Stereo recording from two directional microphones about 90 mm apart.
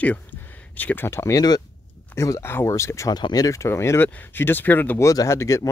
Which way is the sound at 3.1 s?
45° left (ahead or behind).